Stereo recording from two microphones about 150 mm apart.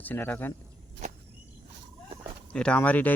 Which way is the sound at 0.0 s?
10° left (ahead or behind).